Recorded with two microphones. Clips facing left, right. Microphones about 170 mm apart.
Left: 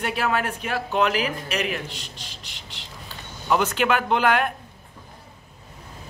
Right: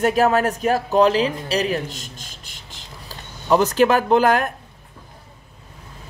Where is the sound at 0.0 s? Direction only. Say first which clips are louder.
Right 8 dB; 40° right (ahead or behind).